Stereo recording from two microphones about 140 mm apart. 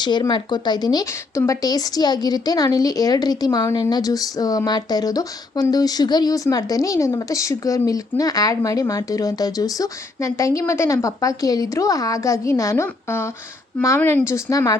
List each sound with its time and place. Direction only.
0.0 s speech: 30° left (ahead or behind)